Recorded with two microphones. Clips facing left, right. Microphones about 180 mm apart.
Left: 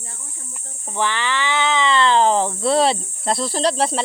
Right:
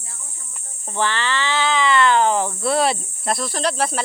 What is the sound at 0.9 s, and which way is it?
Cricket, 15° left (ahead or behind).